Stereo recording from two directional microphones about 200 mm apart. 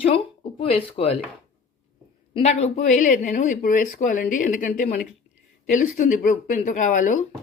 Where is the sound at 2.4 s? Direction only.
30° left (ahead or behind).